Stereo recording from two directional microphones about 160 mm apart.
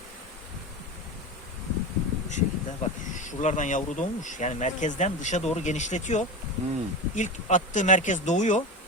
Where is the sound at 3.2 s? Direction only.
50° left (ahead or behind).